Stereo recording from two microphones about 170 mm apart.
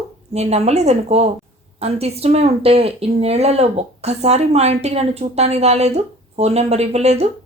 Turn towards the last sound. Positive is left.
turn(degrees=-40)  # may be behind; listen again after turning